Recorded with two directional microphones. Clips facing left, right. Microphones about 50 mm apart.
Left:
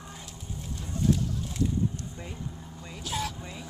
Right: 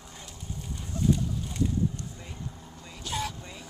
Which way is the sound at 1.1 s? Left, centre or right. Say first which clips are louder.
Even; centre.